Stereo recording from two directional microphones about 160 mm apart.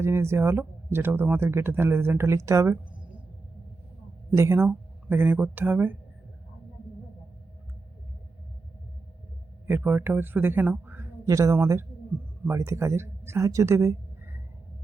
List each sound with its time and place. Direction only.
0.0 s speech: 15° right (ahead or behind)
4.4 s speech: 15° right (ahead or behind)
9.6 s speech: 15° right (ahead or behind)